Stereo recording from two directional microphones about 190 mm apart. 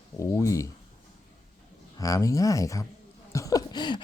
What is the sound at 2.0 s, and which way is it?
A man's voice, 15° left (ahead or behind).